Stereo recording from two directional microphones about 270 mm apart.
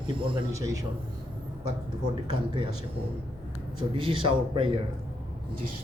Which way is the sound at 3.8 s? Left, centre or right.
Centre.